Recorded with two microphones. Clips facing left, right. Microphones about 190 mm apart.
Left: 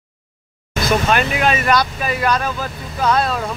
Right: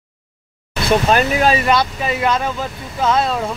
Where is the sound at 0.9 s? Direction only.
35° right (ahead or behind).